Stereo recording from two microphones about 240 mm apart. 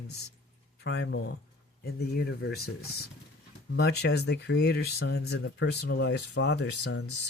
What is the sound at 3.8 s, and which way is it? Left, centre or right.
Speech, left.